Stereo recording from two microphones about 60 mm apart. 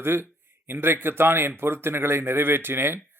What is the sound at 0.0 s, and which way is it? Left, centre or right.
Speech, right.